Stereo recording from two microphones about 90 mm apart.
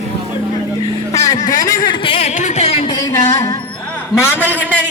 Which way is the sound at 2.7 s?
90° left.